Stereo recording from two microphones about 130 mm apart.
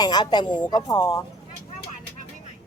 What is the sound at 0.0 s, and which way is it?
Speech, 35° left (ahead or behind).